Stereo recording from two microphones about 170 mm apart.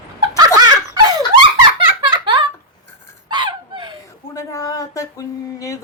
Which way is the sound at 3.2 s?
25° right (ahead or behind).